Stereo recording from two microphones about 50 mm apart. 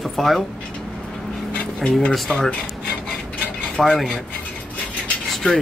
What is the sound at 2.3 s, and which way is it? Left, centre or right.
Speech, left.